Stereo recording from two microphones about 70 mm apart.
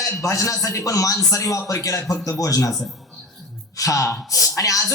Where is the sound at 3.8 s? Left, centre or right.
Left.